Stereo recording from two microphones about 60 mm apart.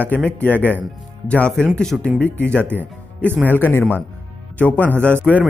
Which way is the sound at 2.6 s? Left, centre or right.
Right.